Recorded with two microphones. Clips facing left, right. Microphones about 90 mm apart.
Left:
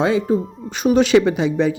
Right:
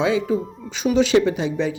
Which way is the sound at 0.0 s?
45° left (ahead or behind).